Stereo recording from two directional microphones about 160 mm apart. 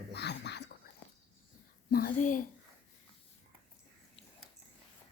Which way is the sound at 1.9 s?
65° left (ahead or behind).